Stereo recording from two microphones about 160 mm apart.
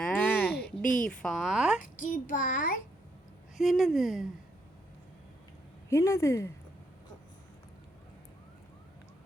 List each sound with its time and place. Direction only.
0.0 s a sound: 10° left (ahead or behind)
1.0 s speech: 5° left (ahead or behind)
1.8 s a child's voice: 55° left (ahead or behind)
3.6 s speech: centre (ahead or behind)
5.9 s speech: 20° left (ahead or behind)